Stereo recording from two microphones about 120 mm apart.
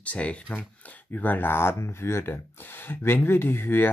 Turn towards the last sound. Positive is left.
turn(degrees=20)  # may be behind; listen again after turning